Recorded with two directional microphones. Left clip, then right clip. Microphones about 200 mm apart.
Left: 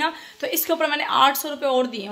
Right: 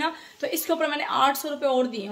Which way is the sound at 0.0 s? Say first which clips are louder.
Left 3 dB; centre (ahead or behind).